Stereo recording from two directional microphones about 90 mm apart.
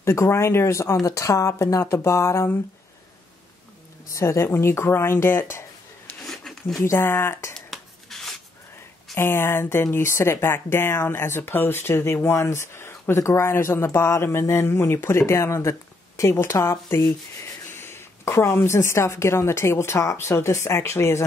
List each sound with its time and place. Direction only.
0.0 s speech: 30° left (ahead or behind)
4.1 s speech: 35° left (ahead or behind)
6.2 s a sound: 5° left (ahead or behind)
6.8 s speech: 30° left (ahead or behind)
7.5 s a sound: 5° left (ahead or behind)
9.1 s speech: 25° left (ahead or behind)